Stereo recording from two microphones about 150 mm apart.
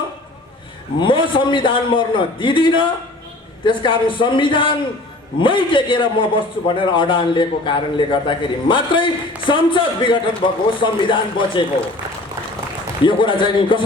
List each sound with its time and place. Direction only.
0.9 s a man's voice: 35° left (ahead or behind)
13.1 s a man's voice: 35° left (ahead or behind)